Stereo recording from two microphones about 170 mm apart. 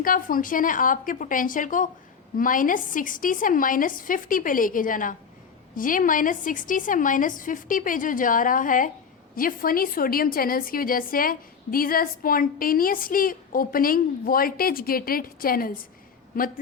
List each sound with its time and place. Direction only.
0.0 s a woman's voice: 55° left (ahead or behind)